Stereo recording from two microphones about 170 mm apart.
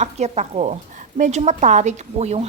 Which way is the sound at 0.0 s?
40° right (ahead or behind).